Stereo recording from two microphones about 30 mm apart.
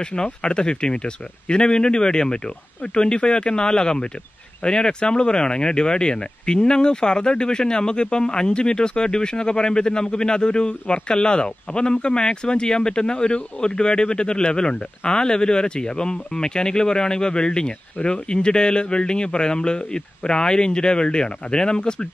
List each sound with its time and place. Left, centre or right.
0.0 s speech: left